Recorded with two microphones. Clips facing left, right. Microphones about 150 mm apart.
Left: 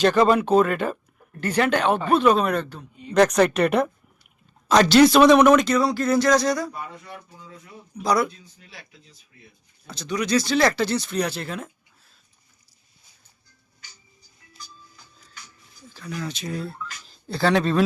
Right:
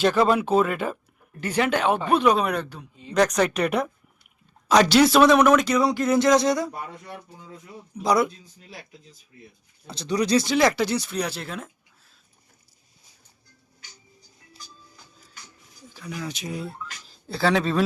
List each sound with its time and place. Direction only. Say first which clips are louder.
0.0 s speech: left 2 dB; 5° right (ahead or behind)
3.2 s speech: left 3 dB; centre (ahead or behind)
5.7 s a sound: even; 15° right (ahead or behind)
7.3 s speech: right 1 dB; 40° right (ahead or behind)
8.0 s a sound: right 1 dB; 20° right (ahead or behind)
8.5 s speech: right 4 dB; 40° right (ahead or behind)
9.8 s a sound: right 3 dB; 30° right (ahead or behind)
10.4 s speech: even; 15° right (ahead or behind); by 11.7 s centre (ahead or behind)
15.9 s speech: left 1 dB; 10° right (ahead or behind)
17.1 s speech: left 1 dB; centre (ahead or behind)